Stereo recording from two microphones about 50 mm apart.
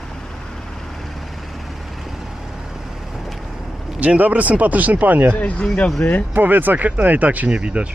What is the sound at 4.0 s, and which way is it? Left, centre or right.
Speech, right.